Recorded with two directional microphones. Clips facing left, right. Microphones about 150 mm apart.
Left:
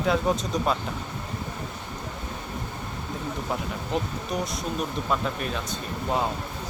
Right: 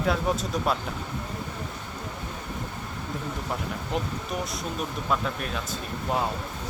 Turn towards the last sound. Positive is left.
turn(degrees=0)  # may be behind; listen again after turning